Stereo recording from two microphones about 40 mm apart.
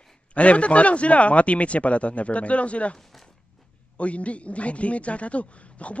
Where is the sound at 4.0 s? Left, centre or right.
Left.